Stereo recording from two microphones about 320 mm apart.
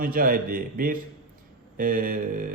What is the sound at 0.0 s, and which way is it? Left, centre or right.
Speech, right.